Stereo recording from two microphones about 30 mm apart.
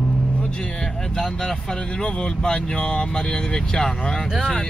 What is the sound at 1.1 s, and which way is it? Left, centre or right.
Speech, centre.